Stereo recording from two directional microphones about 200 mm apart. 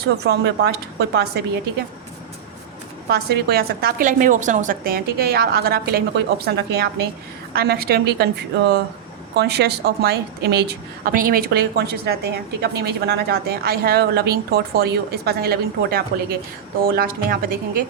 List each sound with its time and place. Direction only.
0.0 s a woman's voice: 55° right (ahead or behind)
3.1 s a woman's voice: 50° right (ahead or behind)